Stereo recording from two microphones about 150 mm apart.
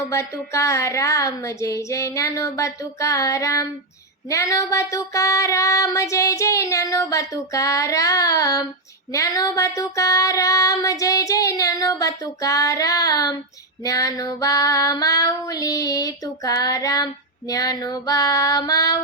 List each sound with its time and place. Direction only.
0.1 s female singing: 20° left (ahead or behind)